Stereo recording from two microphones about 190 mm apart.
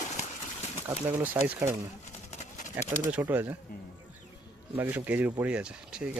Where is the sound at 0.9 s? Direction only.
10° right (ahead or behind).